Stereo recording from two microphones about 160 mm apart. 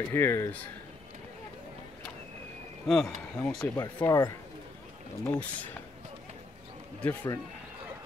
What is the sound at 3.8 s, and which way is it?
Speech, 20° left (ahead or behind).